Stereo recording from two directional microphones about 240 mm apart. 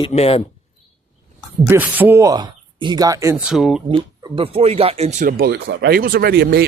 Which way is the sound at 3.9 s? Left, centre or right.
Right.